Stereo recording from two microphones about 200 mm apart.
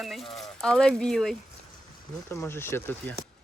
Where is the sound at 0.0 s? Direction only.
Centre (ahead or behind).